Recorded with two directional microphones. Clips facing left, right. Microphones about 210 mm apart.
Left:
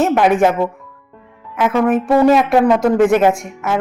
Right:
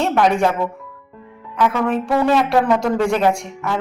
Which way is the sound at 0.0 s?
5° left (ahead or behind).